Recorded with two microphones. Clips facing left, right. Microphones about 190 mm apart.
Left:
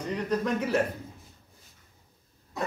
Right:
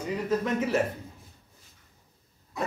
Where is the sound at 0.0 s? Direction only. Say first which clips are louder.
Right 1 dB; 5° right (ahead or behind).